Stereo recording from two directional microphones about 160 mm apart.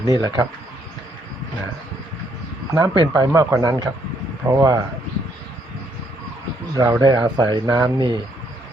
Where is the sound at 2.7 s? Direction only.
25° right (ahead or behind).